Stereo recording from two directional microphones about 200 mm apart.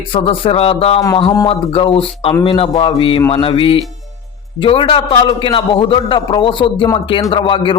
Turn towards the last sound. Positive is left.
turn(degrees=25)  # may be behind; listen again after turning